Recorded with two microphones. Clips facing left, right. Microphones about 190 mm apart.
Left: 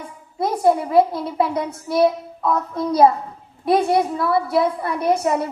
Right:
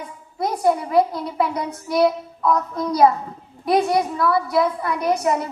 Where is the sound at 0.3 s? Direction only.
25° left (ahead or behind).